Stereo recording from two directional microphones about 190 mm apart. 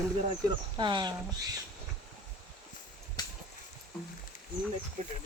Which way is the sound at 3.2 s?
20° left (ahead or behind).